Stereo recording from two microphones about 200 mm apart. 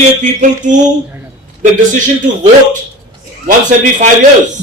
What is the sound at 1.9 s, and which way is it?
A man's voice, 40° right (ahead or behind).